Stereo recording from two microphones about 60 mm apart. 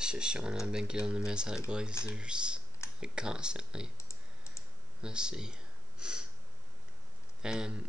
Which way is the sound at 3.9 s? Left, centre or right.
Left.